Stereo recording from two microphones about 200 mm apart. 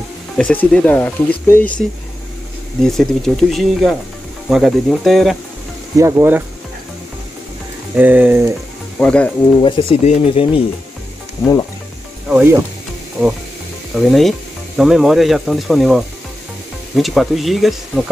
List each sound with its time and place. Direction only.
0.4 s speech: 5° left (ahead or behind)
5.9 s speech: 15° right (ahead or behind)
7.9 s speech: 10° right (ahead or behind)
9.0 s speech: 5° left (ahead or behind)
9.6 s speech: 25° left (ahead or behind)
12.3 s speech: 5° right (ahead or behind)
13.9 s speech: centre (ahead or behind)